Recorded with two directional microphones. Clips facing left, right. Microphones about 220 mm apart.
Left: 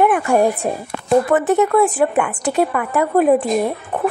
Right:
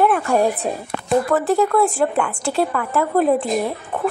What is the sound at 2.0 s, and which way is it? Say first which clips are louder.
A woman's voice: left 2 dB; 5° left (ahead or behind).